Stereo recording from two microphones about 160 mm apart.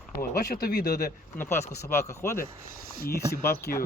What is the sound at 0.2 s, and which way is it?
Speech, 70° left (ahead or behind).